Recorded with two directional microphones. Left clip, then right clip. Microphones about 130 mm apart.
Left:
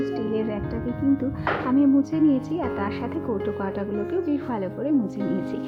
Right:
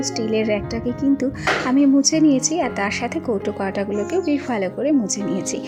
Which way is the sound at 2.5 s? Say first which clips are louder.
Right 6 dB; 30° right (ahead or behind).